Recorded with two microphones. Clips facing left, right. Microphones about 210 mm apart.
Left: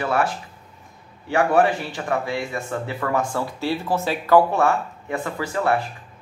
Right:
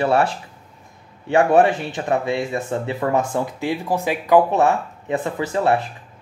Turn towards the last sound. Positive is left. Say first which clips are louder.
# right 3 dB
turn(degrees=-20)  # may be behind; listen again after turning